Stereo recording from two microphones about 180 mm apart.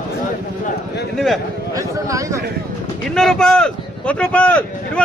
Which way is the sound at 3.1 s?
5° left (ahead or behind).